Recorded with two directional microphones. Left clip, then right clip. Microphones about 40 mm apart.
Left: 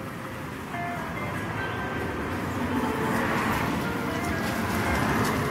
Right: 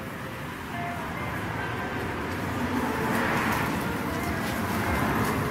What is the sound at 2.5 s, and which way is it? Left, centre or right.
Vehicle, centre.